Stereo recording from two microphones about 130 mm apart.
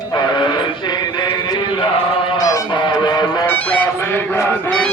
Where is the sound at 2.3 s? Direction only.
25° left (ahead or behind).